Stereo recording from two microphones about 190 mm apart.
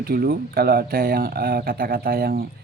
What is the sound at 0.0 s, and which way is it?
Speech, 50° right (ahead or behind).